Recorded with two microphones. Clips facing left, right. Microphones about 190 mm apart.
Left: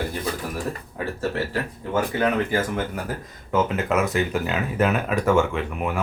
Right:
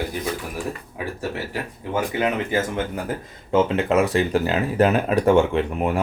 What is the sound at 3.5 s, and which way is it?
Speech, 30° right (ahead or behind).